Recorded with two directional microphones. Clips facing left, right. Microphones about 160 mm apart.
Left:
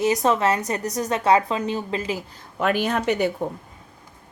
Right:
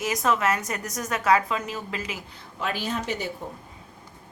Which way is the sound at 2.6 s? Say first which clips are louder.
Left 7 dB; 60° left (ahead or behind).